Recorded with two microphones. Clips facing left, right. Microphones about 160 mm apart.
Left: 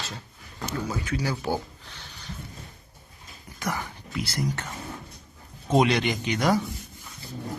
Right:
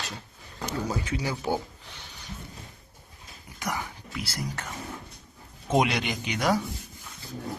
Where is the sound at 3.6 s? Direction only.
10° right (ahead or behind).